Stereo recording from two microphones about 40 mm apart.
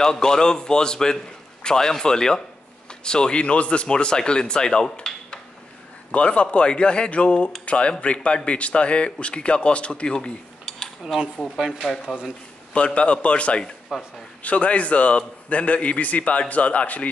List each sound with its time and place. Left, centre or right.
0.0 s a man's voice: centre
6.1 s a man's voice: left
11.8 s speech: centre
12.7 s speech: left
13.9 s a man's voice: centre
14.4 s a man's voice: left